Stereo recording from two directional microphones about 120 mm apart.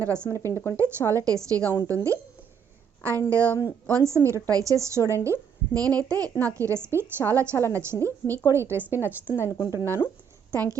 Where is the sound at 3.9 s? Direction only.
25° right (ahead or behind).